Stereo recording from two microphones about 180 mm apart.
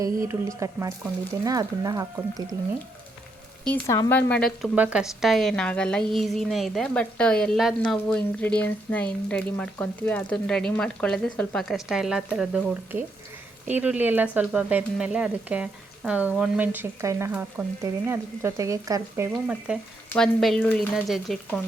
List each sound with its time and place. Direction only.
0.0 s speech: 15° right (ahead or behind)
3.8 s speech: 15° left (ahead or behind); by 19.3 s 15° right (ahead or behind)
19.3 s speech: 5° right (ahead or behind)